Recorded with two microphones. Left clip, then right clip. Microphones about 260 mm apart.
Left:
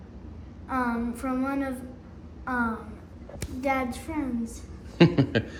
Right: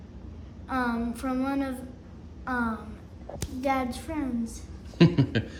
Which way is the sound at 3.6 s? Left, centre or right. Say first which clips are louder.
Even; centre.